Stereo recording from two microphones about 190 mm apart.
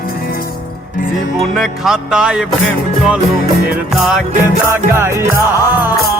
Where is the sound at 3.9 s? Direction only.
Centre (ahead or behind).